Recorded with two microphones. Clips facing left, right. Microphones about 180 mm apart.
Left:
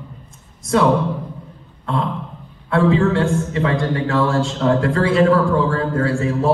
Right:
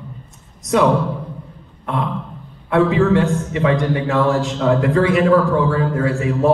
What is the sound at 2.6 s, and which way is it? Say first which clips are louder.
A man's voice: right 1 dB; 20° right (ahead or behind).